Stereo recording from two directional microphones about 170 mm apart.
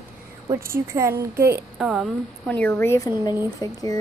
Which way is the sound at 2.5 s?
10° left (ahead or behind).